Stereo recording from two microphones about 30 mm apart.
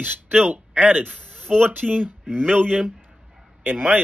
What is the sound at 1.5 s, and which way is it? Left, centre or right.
Speech, right.